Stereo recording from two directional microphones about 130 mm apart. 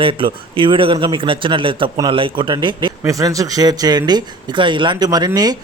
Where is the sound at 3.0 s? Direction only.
25° right (ahead or behind).